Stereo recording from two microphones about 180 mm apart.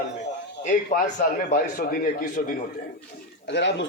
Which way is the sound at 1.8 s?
50° left (ahead or behind).